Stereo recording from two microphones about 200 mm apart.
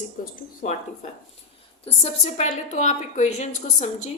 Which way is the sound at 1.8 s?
30° left (ahead or behind).